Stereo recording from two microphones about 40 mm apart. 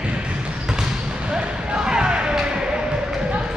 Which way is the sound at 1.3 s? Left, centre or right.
Right.